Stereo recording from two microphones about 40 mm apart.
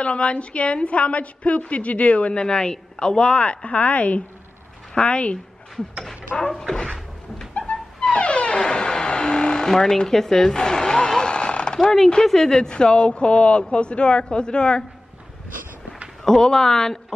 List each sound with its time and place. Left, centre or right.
0.0 s a woman's voice: left
6.7 s cupboard open or close: centre
8.1 s music: left
9.7 s a woman's voice: centre
16.3 s speech: centre